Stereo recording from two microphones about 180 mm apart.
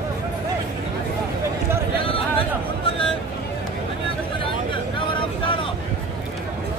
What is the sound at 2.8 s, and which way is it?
Vehicle, 30° left (ahead or behind).